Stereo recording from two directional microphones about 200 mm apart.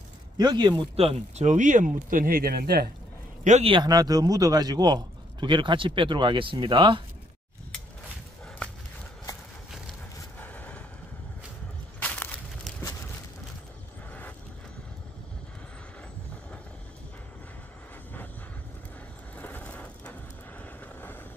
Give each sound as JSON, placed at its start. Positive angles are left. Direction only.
{"t": 0.4, "sound": "speech", "side_deg": -20}
{"t": 3.4, "sound": "speech", "side_deg": -30}
{"t": 10.4, "sound": "vehicle", "side_deg": 5}
{"t": 12.0, "sound": "a sound", "side_deg": 5}
{"t": 19.3, "sound": "vehicle", "side_deg": 10}